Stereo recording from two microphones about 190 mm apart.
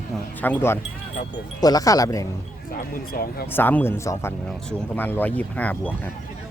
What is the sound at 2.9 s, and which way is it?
Speech, 50° left (ahead or behind).